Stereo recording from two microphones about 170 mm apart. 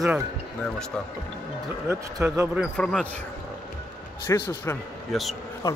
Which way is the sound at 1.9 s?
15° right (ahead or behind).